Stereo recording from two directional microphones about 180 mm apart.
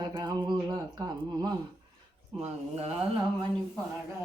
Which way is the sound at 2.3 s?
35° right (ahead or behind).